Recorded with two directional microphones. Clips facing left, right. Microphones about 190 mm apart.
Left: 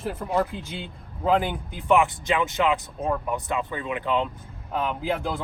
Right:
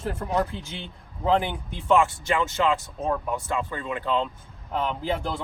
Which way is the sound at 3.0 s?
Centre (ahead or behind).